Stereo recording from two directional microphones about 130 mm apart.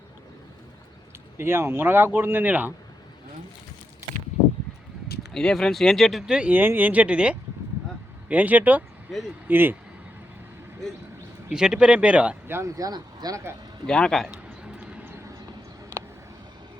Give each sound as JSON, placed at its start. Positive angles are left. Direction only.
{"t": 1.4, "sound": "speech", "side_deg": -20}
{"t": 5.3, "sound": "speech", "side_deg": 5}
{"t": 11.4, "sound": "speech", "side_deg": -5}
{"t": 12.5, "sound": "speech", "side_deg": -25}
{"t": 13.8, "sound": "speech", "side_deg": 5}
{"t": 14.3, "sound": "a sound", "side_deg": -10}